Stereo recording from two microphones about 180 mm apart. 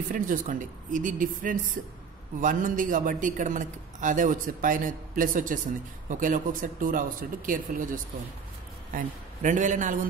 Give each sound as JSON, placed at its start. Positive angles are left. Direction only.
{"t": 0.1, "sound": "a man's voice", "side_deg": -50}